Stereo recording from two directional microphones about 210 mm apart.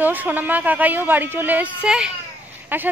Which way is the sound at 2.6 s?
10° right (ahead or behind).